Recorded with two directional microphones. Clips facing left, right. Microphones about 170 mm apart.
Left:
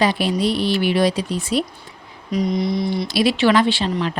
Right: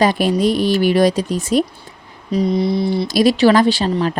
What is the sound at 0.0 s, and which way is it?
Speech, 45° right (ahead or behind).